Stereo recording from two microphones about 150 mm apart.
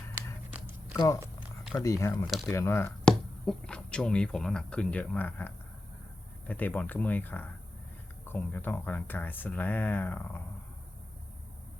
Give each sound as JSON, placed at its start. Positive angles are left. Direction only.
{"t": 0.9, "sound": "speech", "side_deg": 20}
{"t": 3.0, "sound": "speech", "side_deg": 5}